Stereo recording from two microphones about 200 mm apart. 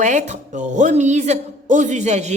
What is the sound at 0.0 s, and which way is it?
A woman's voice, 35° right (ahead or behind).